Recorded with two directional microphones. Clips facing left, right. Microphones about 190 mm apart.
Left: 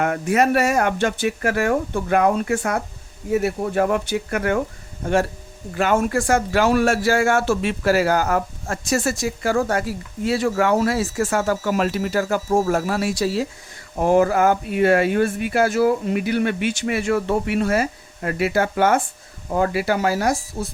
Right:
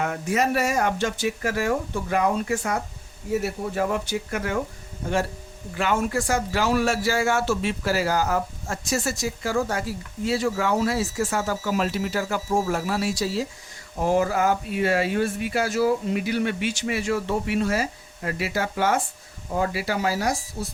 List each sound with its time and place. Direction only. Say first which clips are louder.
0.0 s speech: left 5 dB; 60° left (ahead or behind)
5.7 s speech: left 5 dB; 45° left (ahead or behind)